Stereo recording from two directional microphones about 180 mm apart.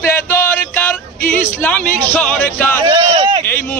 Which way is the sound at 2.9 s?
30° right (ahead or behind).